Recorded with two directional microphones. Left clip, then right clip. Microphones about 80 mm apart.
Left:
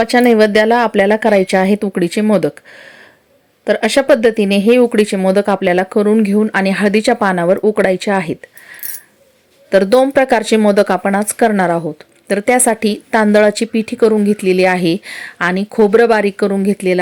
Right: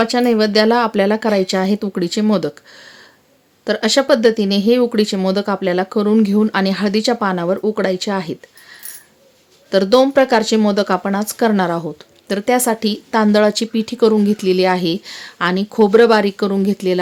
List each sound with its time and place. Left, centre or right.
0.0 s speech: left
1.3 s speech: left
3.8 s speech: left
5.1 s a woman's voice: left
5.4 s speech: left
6.1 s speech: centre; by 8.4 s left
9.6 s speech: left
12.5 s a woman's voice: left; by 14.7 s centre
14.7 s a woman's voice: left; by 17.0 s centre